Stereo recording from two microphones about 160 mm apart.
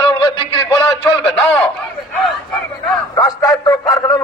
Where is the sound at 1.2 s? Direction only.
10° left (ahead or behind).